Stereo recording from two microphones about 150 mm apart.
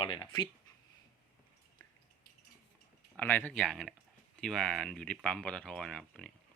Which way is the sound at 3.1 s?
10° left (ahead or behind).